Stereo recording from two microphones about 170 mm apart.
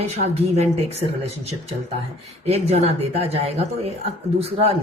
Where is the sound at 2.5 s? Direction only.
40° right (ahead or behind).